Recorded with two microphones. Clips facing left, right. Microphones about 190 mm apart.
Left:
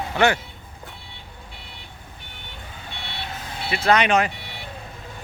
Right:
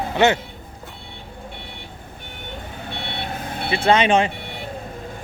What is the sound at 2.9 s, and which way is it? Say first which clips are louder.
Vehicle: right 5 dB; 55° right (ahead or behind).